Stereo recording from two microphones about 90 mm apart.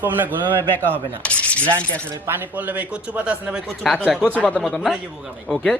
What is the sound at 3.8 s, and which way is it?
Speech, centre (ahead or behind).